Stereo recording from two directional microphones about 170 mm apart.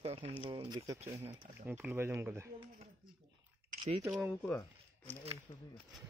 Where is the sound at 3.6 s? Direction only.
45° right (ahead or behind).